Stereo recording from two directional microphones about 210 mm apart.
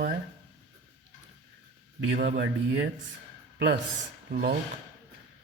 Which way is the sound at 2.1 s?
45° right (ahead or behind).